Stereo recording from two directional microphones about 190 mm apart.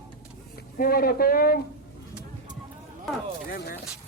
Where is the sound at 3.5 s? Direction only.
55° left (ahead or behind).